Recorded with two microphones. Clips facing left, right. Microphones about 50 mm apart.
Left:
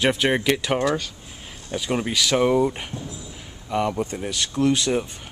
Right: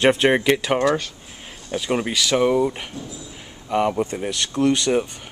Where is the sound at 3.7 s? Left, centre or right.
Centre.